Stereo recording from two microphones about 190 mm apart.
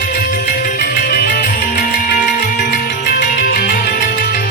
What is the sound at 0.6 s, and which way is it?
Music, 50° left (ahead or behind).